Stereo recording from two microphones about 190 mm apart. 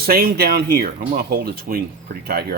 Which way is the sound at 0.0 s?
50° right (ahead or behind).